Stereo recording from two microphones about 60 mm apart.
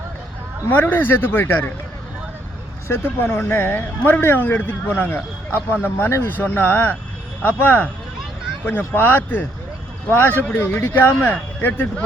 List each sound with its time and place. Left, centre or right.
0.7 s speech: left
2.8 s speech: left